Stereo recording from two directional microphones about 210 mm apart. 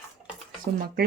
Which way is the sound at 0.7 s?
45° right (ahead or behind).